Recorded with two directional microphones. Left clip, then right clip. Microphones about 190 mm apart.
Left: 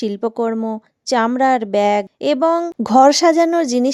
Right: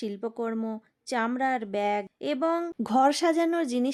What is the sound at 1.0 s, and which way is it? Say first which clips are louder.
A woman's voice: left 12 dB; 40° left (ahead or behind).